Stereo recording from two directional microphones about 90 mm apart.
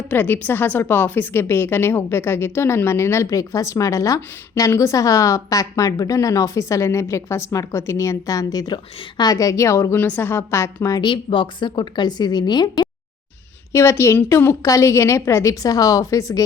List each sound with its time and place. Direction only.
0.1 s a woman's voice: 20° left (ahead or behind)
10.0 s a woman's voice: 20° left (ahead or behind)
11.0 s speech: 70° left (ahead or behind); by 12.9 s 50° left (ahead or behind)
13.7 s a woman's voice: 30° left (ahead or behind)